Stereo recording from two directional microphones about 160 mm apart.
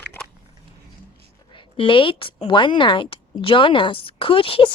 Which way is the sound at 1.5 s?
35° left (ahead or behind).